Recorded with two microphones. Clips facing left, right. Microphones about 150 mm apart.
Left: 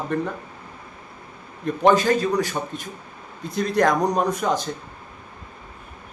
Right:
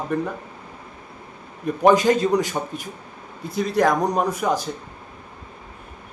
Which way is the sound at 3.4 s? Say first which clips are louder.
Even; 5° right (ahead or behind).